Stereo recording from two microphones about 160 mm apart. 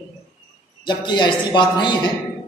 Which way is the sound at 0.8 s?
30° left (ahead or behind).